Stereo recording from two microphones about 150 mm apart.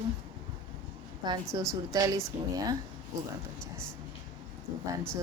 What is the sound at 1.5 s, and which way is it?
Speech, 25° right (ahead or behind).